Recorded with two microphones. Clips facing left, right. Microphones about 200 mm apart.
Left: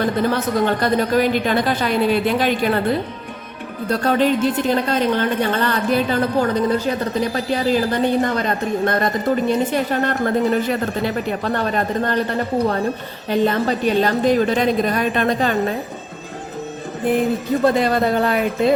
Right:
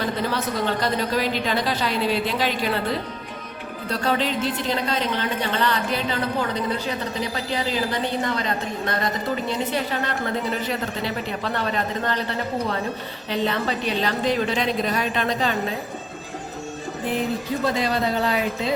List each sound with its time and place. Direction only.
0.0 s speech: 50° left (ahead or behind)
3.8 s speech: 50° left (ahead or behind)
13.3 s speech: 45° left (ahead or behind)
17.6 s speech: 55° left (ahead or behind)